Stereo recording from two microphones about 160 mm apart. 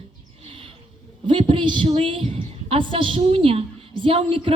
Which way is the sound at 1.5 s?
30° right (ahead or behind).